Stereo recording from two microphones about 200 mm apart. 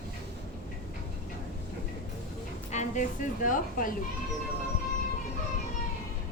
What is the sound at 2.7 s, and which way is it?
A woman's voice, 40° left (ahead or behind).